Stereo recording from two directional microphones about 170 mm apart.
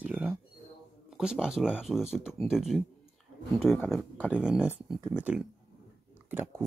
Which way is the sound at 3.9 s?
Centre (ahead or behind).